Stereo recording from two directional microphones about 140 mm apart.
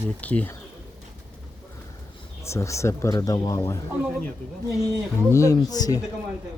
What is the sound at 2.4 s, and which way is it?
Speech, 20° left (ahead or behind).